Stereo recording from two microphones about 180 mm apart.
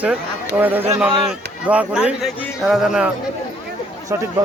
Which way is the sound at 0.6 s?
10° right (ahead or behind).